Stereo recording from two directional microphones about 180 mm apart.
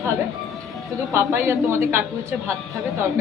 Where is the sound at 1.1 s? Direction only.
15° right (ahead or behind).